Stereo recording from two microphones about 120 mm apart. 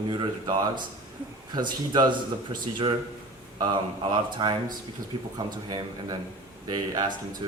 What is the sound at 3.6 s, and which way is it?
Speech, 35° right (ahead or behind).